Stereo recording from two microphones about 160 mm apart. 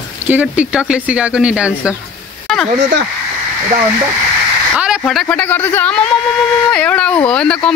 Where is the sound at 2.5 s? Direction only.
Centre (ahead or behind).